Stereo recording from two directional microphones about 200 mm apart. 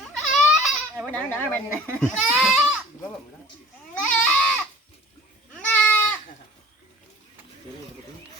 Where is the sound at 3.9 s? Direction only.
5° left (ahead or behind).